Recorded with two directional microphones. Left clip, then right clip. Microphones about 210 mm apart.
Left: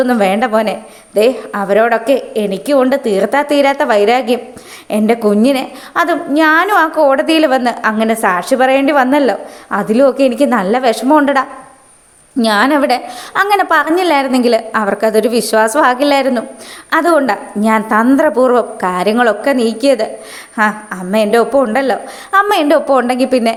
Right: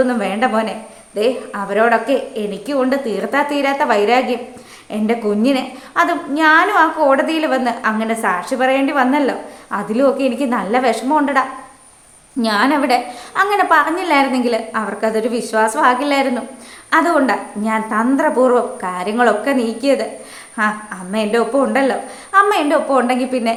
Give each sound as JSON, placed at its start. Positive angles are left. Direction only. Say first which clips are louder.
{"t": 0.0, "sound": "a woman's voice", "louder": "left 4 dB", "side_deg": 40}